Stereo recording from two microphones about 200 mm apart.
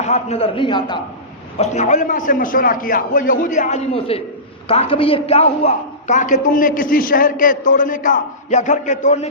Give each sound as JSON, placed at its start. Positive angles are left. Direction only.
{"t": 0.0, "sound": "a man's voice", "side_deg": 35}
{"t": 1.5, "sound": "a woman's voice", "side_deg": 35}